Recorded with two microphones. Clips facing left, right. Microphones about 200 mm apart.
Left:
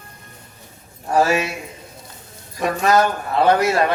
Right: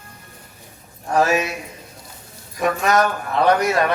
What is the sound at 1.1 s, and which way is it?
Speech, 30° left (ahead or behind).